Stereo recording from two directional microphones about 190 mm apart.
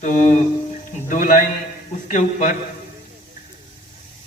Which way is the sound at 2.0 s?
40° left (ahead or behind).